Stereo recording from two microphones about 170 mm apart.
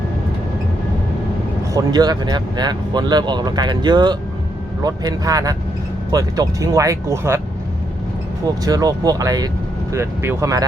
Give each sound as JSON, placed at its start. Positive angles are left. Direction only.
{"t": 1.7, "sound": "speech", "side_deg": -25}
{"t": 8.6, "sound": "speech", "side_deg": -20}